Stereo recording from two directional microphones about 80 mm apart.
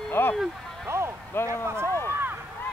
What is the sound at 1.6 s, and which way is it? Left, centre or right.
Run, right.